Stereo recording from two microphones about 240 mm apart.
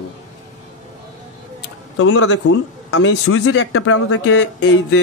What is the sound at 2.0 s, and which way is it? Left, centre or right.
Speech, left.